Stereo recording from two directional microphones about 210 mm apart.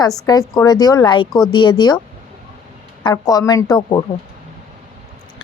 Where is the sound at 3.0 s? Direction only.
15° left (ahead or behind).